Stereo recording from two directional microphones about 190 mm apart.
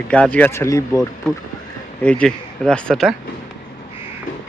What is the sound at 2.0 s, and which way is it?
A man's voice, 5° left (ahead or behind).